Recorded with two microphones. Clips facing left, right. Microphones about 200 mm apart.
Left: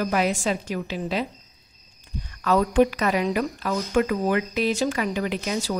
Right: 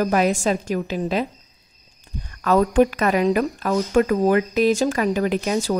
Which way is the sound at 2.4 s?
45° right (ahead or behind).